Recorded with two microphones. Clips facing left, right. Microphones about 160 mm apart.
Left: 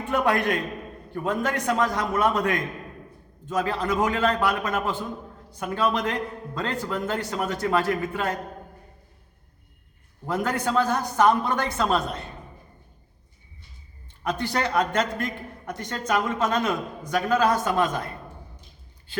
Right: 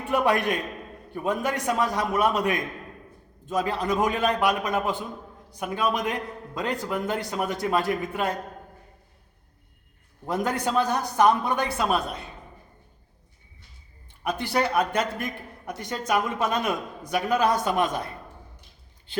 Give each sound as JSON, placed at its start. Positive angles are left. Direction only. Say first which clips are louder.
{"t": 0.1, "sound": "a man's voice", "louder": "even", "side_deg": -15}
{"t": 10.2, "sound": "a man's voice", "louder": "even", "side_deg": -15}
{"t": 14.3, "sound": "a man's voice", "louder": "right 1 dB", "side_deg": -10}